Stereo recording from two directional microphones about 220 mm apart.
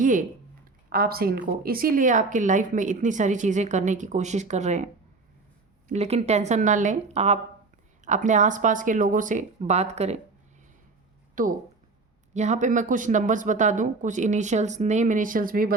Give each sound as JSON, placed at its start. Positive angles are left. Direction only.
{"t": 0.0, "sound": "speech", "side_deg": -35}
{"t": 5.9, "sound": "speech", "side_deg": -30}
{"t": 11.4, "sound": "speech", "side_deg": -40}